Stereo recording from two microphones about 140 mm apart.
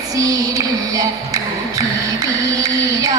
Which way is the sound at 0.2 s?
25° right (ahead or behind).